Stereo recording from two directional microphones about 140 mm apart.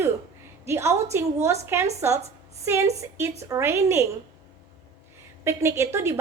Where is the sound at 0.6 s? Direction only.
20° right (ahead or behind).